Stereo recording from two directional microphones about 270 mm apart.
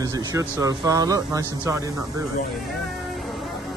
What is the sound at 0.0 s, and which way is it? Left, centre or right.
Speech, centre.